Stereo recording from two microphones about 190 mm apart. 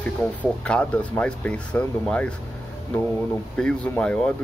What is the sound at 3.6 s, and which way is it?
Speech, 5° left (ahead or behind).